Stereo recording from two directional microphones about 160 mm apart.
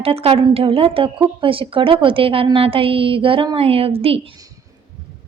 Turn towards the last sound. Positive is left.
turn(degrees=-35)  # may be behind; listen again after turning